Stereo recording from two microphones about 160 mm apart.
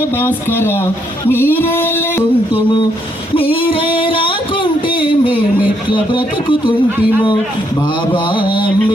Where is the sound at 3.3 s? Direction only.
35° left (ahead or behind).